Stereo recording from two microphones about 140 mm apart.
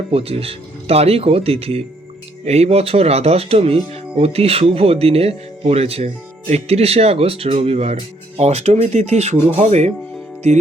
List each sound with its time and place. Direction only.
0.1 s speech: 45° right (ahead or behind)